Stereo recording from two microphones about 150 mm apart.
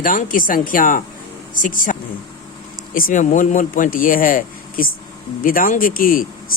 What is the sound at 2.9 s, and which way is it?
Speech, 65° left (ahead or behind).